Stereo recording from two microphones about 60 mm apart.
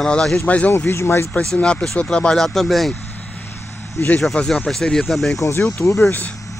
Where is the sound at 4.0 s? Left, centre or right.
Left.